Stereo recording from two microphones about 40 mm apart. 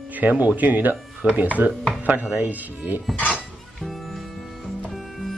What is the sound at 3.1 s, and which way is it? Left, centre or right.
Speech, centre.